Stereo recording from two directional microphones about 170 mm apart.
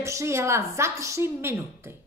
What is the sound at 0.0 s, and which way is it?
A woman's voice, 15° right (ahead or behind).